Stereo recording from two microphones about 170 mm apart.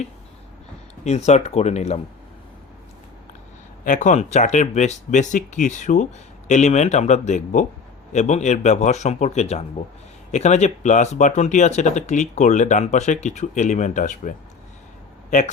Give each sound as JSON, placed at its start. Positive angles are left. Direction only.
{"t": 1.0, "sound": "speech", "side_deg": 40}
{"t": 3.8, "sound": "speech", "side_deg": 45}